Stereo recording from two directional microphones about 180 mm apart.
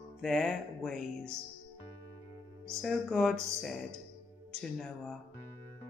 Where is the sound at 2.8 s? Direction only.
Centre (ahead or behind).